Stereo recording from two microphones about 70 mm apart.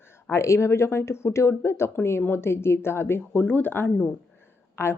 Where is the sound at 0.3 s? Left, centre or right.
Left.